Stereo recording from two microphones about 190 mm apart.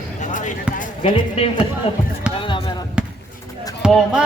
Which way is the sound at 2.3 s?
25° left (ahead or behind).